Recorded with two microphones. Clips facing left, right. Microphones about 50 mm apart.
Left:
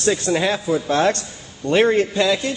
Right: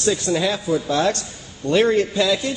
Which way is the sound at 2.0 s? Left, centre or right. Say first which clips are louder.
Left 1 dB; centre.